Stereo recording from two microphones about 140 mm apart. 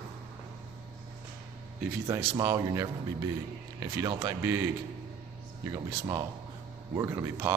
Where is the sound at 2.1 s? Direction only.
20° right (ahead or behind).